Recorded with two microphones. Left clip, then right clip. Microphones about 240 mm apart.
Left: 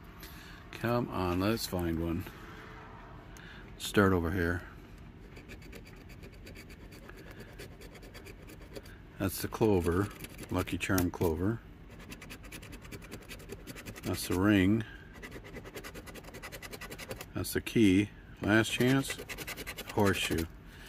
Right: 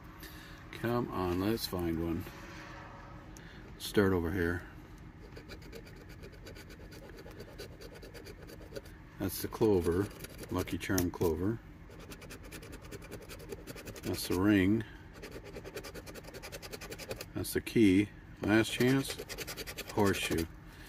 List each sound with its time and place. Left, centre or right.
0.7 s speech: centre
3.8 s speech: centre
9.2 s speech: centre
14.0 s speech: centre
17.3 s speech: centre